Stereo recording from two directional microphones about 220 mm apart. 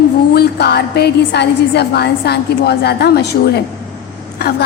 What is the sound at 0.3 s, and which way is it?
A woman's voice, 45° left (ahead or behind).